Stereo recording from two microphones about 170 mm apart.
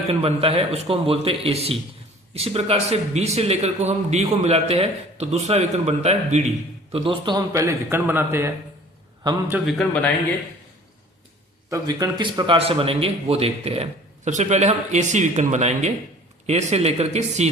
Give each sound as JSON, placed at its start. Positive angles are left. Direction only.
{"t": 0.1, "sound": "a man's voice", "side_deg": -35}
{"t": 9.6, "sound": "speech", "side_deg": 5}
{"t": 11.7, "sound": "a man's voice", "side_deg": -20}